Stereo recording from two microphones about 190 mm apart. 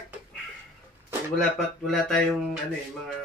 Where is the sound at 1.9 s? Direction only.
Centre (ahead or behind).